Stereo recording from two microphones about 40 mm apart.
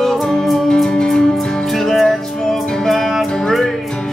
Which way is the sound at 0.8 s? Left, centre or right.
Left.